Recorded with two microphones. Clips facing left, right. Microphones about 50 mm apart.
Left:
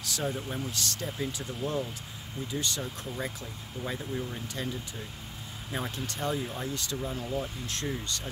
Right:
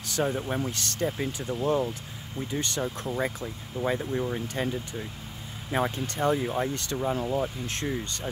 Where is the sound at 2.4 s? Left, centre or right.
Right.